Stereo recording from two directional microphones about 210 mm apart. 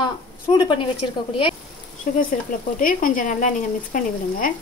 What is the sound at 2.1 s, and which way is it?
A woman's voice, 40° left (ahead or behind).